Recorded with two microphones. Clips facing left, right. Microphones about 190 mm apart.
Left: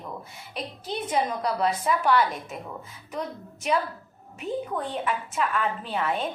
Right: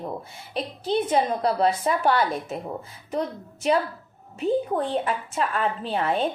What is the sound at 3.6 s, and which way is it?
A woman's voice, 30° right (ahead or behind).